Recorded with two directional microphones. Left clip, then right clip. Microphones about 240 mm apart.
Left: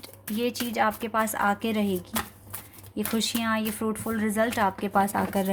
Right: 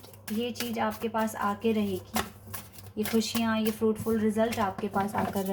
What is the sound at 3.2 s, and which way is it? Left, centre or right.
Speech, left.